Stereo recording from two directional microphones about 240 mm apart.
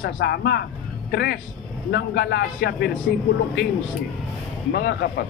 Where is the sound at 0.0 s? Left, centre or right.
Left.